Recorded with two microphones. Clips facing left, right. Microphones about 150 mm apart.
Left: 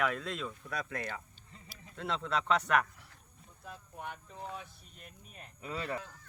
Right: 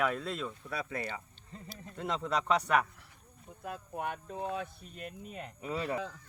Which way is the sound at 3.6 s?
65° right (ahead or behind).